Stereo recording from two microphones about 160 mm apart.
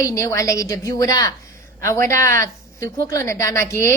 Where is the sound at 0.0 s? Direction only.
20° left (ahead or behind).